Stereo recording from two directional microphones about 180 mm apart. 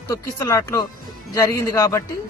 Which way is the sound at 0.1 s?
15° left (ahead or behind).